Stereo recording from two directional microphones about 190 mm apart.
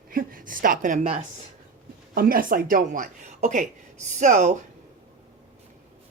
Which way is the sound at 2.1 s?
50° right (ahead or behind).